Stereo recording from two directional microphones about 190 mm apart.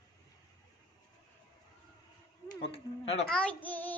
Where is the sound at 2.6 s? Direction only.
30° left (ahead or behind).